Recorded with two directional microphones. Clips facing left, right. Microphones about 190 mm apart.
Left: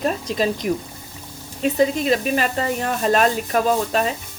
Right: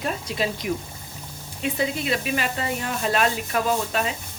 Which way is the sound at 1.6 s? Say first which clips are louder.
Left 7 dB; 40° left (ahead or behind).